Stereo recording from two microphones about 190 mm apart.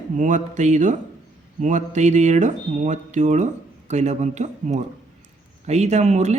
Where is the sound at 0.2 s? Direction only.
40° right (ahead or behind).